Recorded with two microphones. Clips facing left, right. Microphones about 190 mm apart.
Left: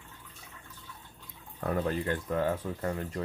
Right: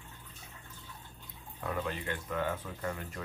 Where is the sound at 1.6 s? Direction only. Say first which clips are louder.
Left 6 dB; 45° left (ahead or behind).